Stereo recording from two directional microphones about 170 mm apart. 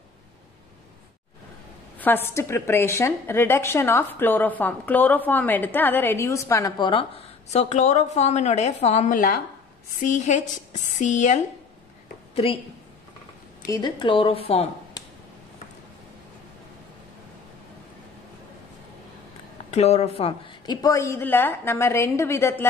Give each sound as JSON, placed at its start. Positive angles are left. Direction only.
{"t": 2.0, "sound": "a woman's voice", "side_deg": 10}
{"t": 6.9, "sound": "speech", "side_deg": 35}
{"t": 13.7, "sound": "a woman's voice", "side_deg": 25}
{"t": 19.7, "sound": "a woman's voice", "side_deg": 40}